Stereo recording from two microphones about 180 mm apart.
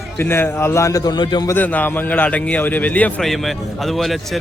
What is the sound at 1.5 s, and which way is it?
A man's voice, 10° left (ahead or behind).